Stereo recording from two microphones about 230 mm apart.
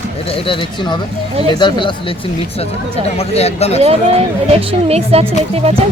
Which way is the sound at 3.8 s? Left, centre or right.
Right.